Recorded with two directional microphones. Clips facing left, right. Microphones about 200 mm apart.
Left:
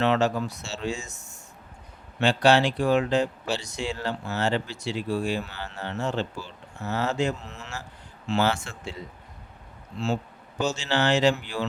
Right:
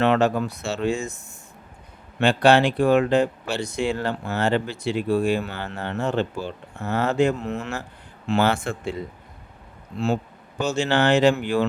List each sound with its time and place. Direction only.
0.0 s speech: 55° right (ahead or behind)
10.6 s speech: 55° right (ahead or behind)